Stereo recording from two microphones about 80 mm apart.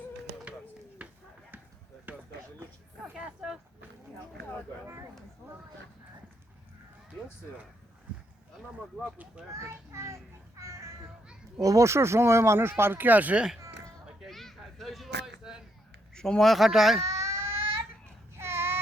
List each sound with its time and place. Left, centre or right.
1.0 s a sound: centre
9.1 s a child's voice: centre
9.6 s a child's voice: right
10.6 s cat: right
11.6 s speech: right; by 13.6 s centre
14.2 s a sound: centre
16.1 s speech: centre
17.2 s cat: right
18.3 s a sound: right